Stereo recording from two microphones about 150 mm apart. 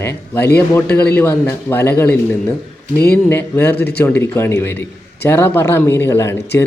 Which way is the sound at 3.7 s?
90° left.